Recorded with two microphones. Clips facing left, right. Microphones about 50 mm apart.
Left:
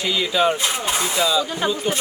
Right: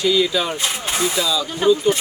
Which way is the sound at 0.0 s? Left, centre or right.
Centre.